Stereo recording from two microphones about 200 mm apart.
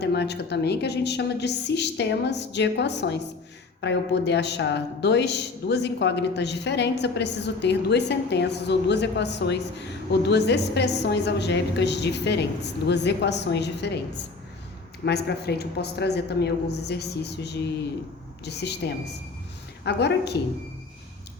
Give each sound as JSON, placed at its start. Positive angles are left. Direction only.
{"t": 0.0, "sound": "speech", "side_deg": 55}
{"t": 15.0, "sound": "speech", "side_deg": 55}